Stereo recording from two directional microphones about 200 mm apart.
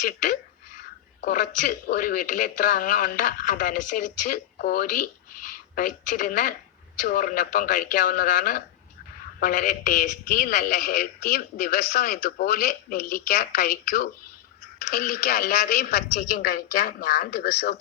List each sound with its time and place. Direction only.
0.0 s a man's voice: 40° left (ahead or behind)